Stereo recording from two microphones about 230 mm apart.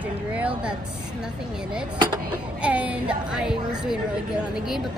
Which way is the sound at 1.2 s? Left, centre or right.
Centre.